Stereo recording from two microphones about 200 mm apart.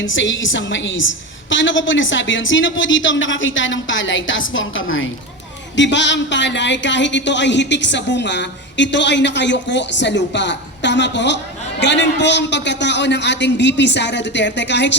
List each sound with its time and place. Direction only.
0.0 s a woman's voice: 70° left (ahead or behind)
5.7 s speech: 65° left (ahead or behind)